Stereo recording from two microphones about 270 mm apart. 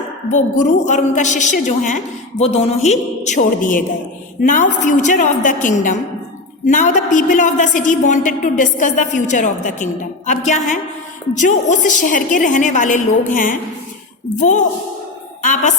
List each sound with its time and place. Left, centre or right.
0.3 s a woman's voice: left
15.4 s speech: left